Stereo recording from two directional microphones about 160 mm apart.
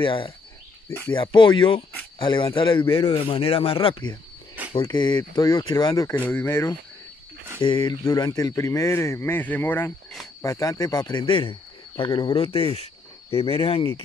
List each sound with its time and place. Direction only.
0.0 s a man's voice: 35° left (ahead or behind)
0.8 s speech: 15° left (ahead or behind)
1.1 s a man's voice: 30° left (ahead or behind)
6.1 s speech: 10° left (ahead or behind)
7.6 s a man's voice: 25° left (ahead or behind)